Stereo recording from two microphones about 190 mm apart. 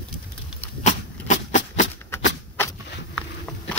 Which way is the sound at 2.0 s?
15° left (ahead or behind).